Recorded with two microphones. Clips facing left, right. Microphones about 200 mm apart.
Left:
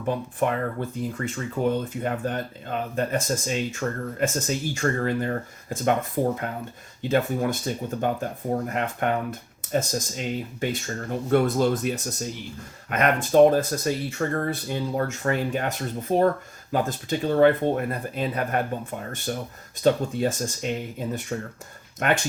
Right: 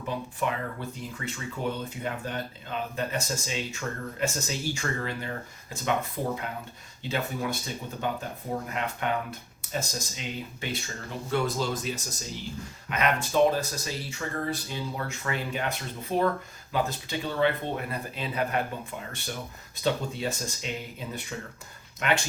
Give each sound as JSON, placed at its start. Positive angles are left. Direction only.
{"t": 0.1, "sound": "speech", "side_deg": 50}
{"t": 7.0, "sound": "speech", "side_deg": 50}